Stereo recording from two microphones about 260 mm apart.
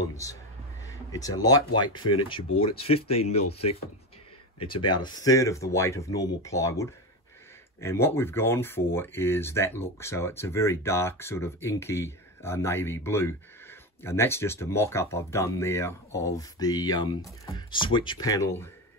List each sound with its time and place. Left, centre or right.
0.1 s speech: centre
4.6 s speech: centre